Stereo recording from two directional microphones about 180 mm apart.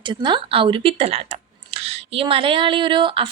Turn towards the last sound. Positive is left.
turn(degrees=-30)  # may be behind; listen again after turning